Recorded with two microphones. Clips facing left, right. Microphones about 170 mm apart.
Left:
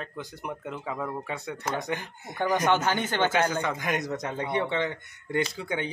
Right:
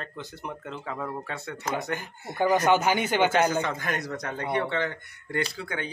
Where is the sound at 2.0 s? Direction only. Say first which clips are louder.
Right 4 dB; 10° right (ahead or behind).